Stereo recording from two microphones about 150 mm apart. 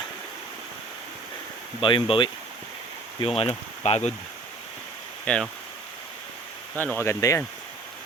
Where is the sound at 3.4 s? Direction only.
40° left (ahead or behind).